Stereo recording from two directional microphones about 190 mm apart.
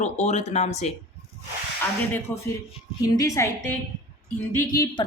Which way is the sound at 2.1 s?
10° left (ahead or behind).